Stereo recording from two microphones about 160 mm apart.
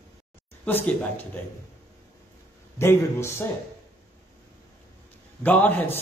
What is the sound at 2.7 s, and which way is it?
Speech, 15° left (ahead or behind).